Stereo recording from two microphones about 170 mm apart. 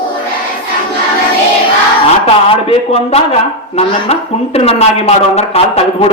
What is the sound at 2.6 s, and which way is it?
Speech, 35° left (ahead or behind).